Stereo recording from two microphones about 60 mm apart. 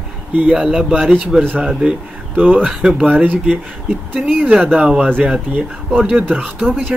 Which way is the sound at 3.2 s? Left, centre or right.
Right.